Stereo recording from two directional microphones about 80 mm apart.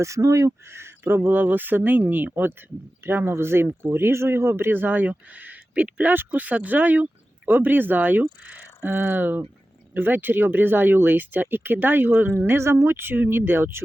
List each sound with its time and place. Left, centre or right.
0.0 s speech: right